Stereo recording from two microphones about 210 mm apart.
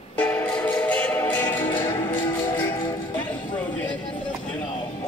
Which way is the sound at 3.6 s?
5° left (ahead or behind).